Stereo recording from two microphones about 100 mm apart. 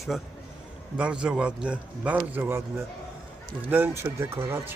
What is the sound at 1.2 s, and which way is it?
A man's voice, 10° right (ahead or behind).